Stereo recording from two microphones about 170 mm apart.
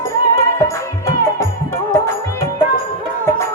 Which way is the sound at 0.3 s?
15° left (ahead or behind).